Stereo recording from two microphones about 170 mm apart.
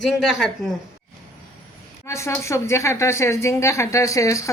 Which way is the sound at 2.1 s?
15° left (ahead or behind).